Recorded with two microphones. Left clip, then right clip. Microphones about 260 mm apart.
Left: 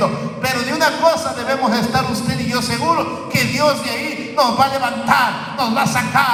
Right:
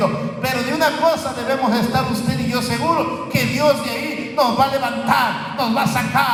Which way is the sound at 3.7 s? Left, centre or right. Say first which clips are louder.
Right 1 dB; left.